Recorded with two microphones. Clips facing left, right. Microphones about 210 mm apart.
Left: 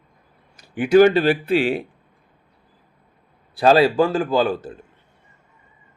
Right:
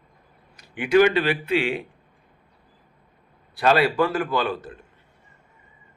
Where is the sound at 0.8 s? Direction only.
40° left (ahead or behind).